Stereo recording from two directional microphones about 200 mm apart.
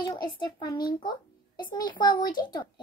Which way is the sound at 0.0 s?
20° left (ahead or behind).